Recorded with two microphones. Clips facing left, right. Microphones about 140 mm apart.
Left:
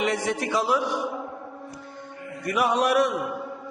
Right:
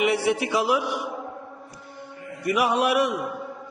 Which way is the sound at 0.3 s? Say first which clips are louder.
Right 2 dB; 10° right (ahead or behind).